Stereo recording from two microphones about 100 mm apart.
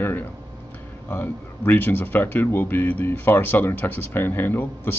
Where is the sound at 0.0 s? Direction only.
20° left (ahead or behind).